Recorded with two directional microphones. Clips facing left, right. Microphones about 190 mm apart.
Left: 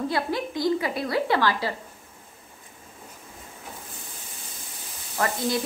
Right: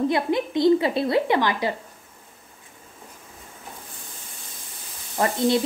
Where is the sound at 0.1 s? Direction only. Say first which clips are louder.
Right 5 dB; 20° right (ahead or behind).